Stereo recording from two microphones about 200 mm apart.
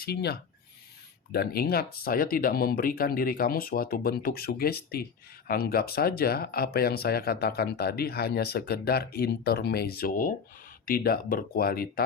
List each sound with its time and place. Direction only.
0.0 s speech: 55° left (ahead or behind)